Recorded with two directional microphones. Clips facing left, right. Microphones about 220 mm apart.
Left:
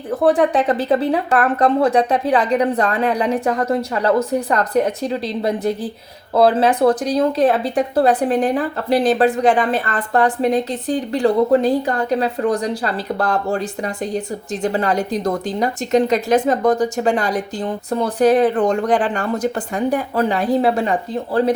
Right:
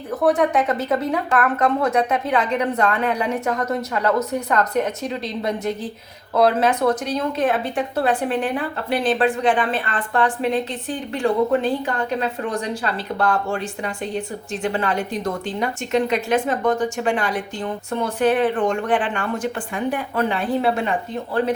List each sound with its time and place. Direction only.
0.1 s speech: 30° left (ahead or behind)